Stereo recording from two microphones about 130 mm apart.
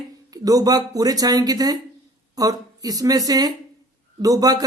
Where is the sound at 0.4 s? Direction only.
30° right (ahead or behind).